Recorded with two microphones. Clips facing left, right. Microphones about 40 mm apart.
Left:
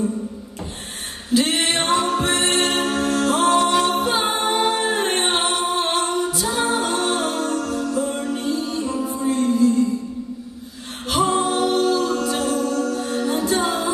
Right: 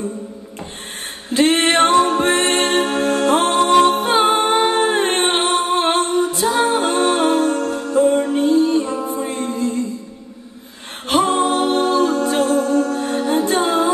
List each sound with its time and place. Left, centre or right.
1.3 s music: right
11.1 s a capella: right